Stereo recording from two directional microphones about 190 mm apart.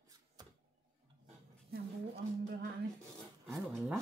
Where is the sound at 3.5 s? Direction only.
Centre (ahead or behind).